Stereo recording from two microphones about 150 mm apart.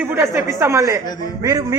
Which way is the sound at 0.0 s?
20° right (ahead or behind).